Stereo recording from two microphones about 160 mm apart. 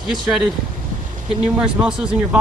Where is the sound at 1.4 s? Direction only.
5° right (ahead or behind).